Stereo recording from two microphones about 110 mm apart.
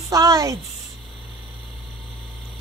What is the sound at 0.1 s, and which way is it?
Speech, 30° right (ahead or behind).